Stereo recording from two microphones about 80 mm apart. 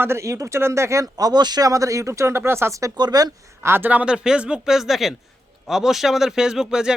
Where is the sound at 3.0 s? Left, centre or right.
Right.